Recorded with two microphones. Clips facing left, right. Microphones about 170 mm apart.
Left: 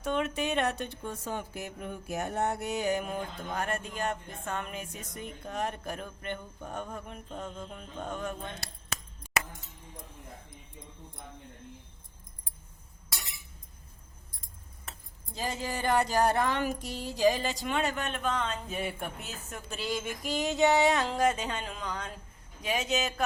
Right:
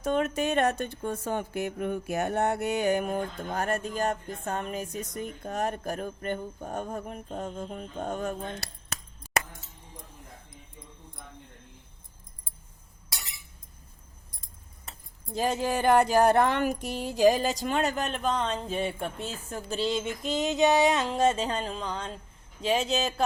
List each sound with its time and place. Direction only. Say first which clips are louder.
0.0 s speech: right 4 dB; 40° right (ahead or behind)
15.4 s speech: right 7 dB; 60° right (ahead or behind); by 23.2 s 30° right (ahead or behind)